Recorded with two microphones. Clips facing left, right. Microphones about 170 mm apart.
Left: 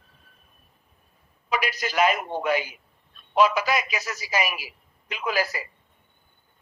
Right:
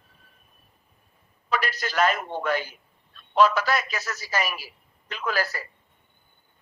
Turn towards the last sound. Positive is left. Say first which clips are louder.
# left 1 dB
turn(degrees=10)  # may be behind; listen again after turning